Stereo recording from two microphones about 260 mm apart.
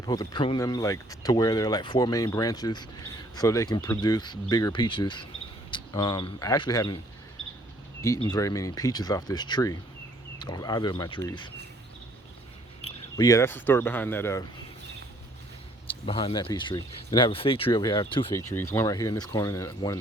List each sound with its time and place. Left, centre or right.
0.0 s speech: centre
8.0 s speech: centre
12.8 s speech: centre
16.0 s speech: centre